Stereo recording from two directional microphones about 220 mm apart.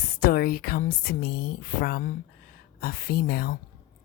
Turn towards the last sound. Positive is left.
turn(degrees=45)  # may be behind; listen again after turning